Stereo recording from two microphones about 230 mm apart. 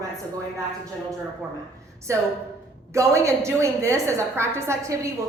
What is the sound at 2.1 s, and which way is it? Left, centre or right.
A woman's voice, centre.